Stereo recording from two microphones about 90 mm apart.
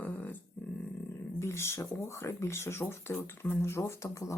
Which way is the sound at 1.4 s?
30° left (ahead or behind).